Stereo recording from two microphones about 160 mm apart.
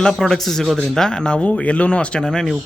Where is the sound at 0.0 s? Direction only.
5° left (ahead or behind).